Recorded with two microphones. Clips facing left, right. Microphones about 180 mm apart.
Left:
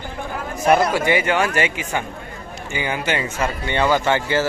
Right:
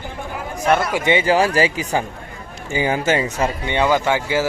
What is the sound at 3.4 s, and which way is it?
Speech, 15° right (ahead or behind).